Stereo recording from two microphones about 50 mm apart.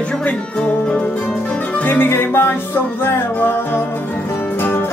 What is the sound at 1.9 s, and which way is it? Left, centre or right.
Music, left.